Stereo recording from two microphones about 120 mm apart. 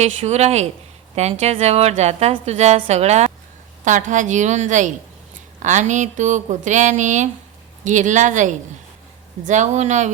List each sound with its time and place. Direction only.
0.0 s a woman's voice: 65° right (ahead or behind)
3.8 s speech: 90° right